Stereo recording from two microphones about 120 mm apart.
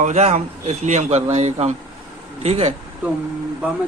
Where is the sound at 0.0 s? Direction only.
75° right (ahead or behind).